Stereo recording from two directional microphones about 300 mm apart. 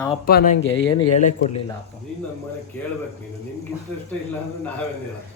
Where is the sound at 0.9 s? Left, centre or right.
Centre.